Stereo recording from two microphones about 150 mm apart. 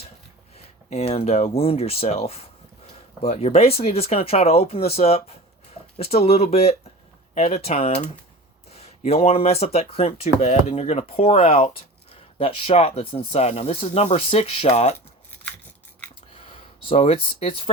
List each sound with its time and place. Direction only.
0.5 s speech: 45° left (ahead or behind)
16.5 s speech: 40° left (ahead or behind)